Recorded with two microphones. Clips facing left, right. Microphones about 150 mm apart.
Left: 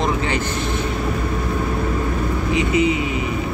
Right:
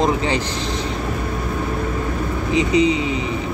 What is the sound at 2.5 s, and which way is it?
Speech, 20° right (ahead or behind).